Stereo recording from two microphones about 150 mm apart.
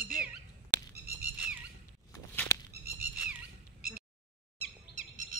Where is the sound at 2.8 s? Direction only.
10° right (ahead or behind).